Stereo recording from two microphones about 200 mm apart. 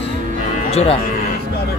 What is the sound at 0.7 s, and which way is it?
Speech, 30° left (ahead or behind).